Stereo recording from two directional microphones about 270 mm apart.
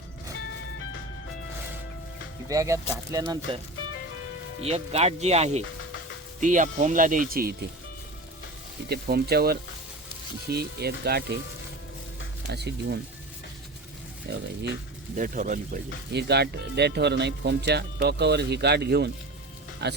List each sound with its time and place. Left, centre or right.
2.5 s speech: centre
4.6 s speech: right
8.9 s speech: right
12.5 s speech: right
14.3 s speech: right